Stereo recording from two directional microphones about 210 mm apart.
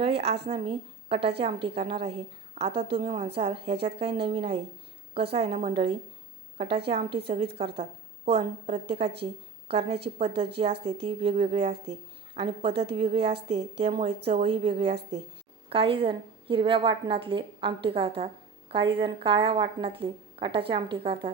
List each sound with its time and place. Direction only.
0.0 s a woman's voice: 30° right (ahead or behind)